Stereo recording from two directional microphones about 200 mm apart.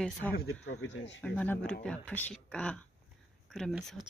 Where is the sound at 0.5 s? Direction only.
90° left; by 1.2 s 65° left (ahead or behind).